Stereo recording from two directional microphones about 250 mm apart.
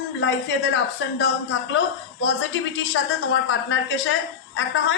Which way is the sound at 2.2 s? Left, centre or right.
Left.